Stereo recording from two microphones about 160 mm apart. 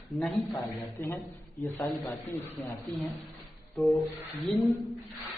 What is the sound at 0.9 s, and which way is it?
Speech, 15° left (ahead or behind).